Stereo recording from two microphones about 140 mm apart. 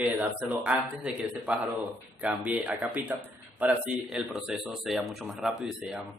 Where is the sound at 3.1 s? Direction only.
20° right (ahead or behind).